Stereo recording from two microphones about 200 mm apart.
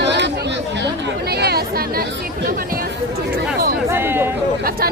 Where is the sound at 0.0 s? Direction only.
60° right (ahead or behind).